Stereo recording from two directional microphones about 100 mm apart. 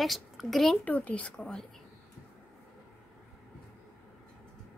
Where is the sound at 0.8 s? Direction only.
15° left (ahead or behind).